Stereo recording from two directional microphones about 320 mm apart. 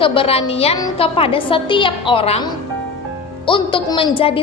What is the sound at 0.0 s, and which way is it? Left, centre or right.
A woman's voice, centre.